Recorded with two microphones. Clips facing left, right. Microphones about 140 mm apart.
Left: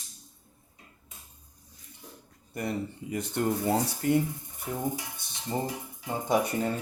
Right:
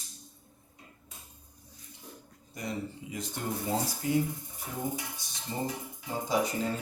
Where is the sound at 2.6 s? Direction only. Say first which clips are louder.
Left 4 dB; 60° left (ahead or behind).